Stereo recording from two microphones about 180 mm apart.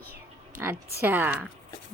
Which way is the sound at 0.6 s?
15° right (ahead or behind).